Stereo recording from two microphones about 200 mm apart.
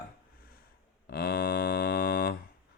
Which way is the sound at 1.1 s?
50° left (ahead or behind).